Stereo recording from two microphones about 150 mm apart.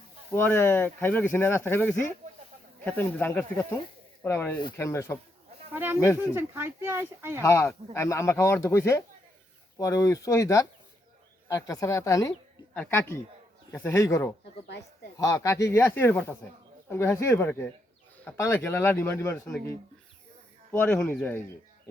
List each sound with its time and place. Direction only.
0.3 s speech: 15° left (ahead or behind)
5.7 s speech: 15° right (ahead or behind)
7.4 s speech: 15° left (ahead or behind)
15.4 s speech: 20° left (ahead or behind)
20.7 s speech: 10° left (ahead or behind)